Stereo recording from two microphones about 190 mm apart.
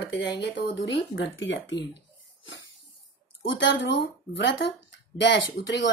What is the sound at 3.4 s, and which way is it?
Speech, 70° left (ahead or behind).